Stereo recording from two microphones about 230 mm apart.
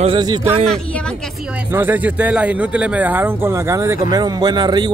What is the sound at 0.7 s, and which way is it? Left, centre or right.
Speech, centre.